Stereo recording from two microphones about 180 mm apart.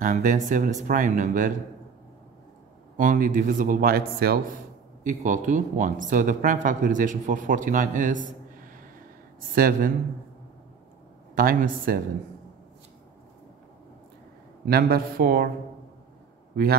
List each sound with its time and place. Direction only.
0.0 s speech: 45° right (ahead or behind)
3.0 s speech: 45° right (ahead or behind)
5.0 s speech: 45° right (ahead or behind)
9.6 s speech: 50° right (ahead or behind)
11.3 s speech: 55° right (ahead or behind)
14.7 s speech: 55° right (ahead or behind)